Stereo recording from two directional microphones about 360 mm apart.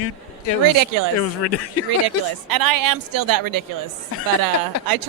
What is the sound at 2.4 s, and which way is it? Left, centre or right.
A woman's voice, right.